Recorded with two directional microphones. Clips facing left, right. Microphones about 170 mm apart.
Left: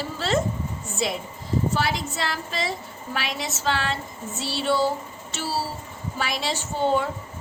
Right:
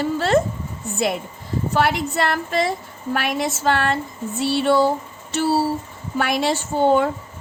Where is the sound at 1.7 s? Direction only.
60° right (ahead or behind).